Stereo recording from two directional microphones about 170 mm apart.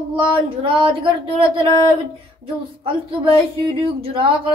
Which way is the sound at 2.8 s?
30° right (ahead or behind).